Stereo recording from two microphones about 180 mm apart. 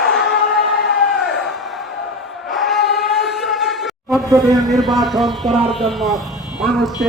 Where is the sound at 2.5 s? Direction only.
Centre (ahead or behind).